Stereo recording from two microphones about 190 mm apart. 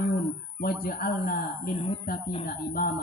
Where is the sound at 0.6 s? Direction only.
50° left (ahead or behind).